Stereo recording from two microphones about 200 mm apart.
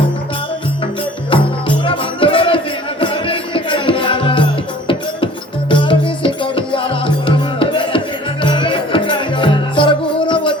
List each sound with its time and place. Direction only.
1.3 s music: 25° left (ahead or behind)